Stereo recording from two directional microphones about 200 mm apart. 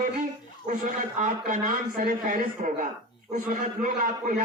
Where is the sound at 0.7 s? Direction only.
40° right (ahead or behind).